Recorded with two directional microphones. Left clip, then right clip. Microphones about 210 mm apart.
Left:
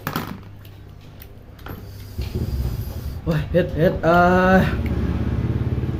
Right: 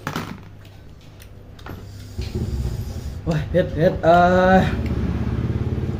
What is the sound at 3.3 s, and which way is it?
Speech, 5° left (ahead or behind).